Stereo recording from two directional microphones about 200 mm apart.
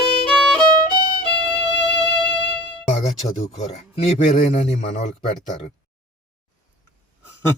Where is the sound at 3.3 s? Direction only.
30° left (ahead or behind).